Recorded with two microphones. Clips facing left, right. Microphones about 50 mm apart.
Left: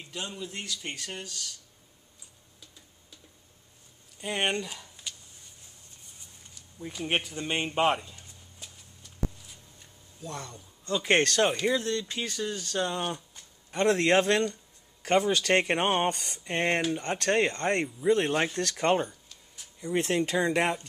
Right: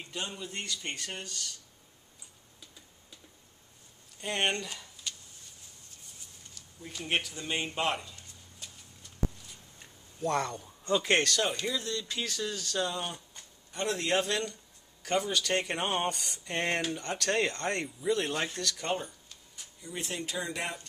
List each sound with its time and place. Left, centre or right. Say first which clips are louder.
0.0 s speech: left 1 dB; centre
4.2 s speech: left 2 dB; centre
6.5 s speech: left 5 dB; centre
10.2 s a man's voice: right 9 dB; right
11.2 s speech: left 6 dB; left
12.0 s speech: left 2 dB; left
13.8 s speech: left 7 dB; left
16.4 s speech: left 4 dB; left
18.6 s speech: left 7 dB; left
19.0 s a sound: left 2 dB; centre
19.8 s speech: left 11 dB; left